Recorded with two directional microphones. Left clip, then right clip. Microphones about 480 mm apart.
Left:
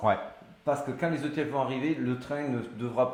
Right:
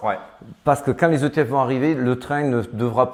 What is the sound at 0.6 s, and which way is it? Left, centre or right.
Speech, right.